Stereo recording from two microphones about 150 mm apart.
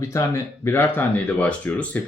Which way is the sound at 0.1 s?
15° left (ahead or behind).